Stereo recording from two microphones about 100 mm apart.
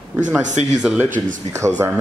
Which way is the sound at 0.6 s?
90° right.